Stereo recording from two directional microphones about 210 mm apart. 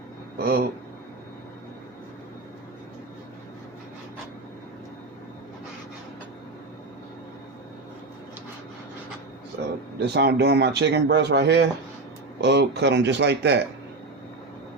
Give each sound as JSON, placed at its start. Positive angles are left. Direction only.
{"t": 0.3, "sound": "speech", "side_deg": -45}
{"t": 10.2, "sound": "speech", "side_deg": -50}